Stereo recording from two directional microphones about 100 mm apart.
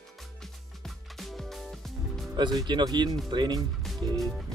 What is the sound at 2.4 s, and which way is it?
Speech, 50° right (ahead or behind).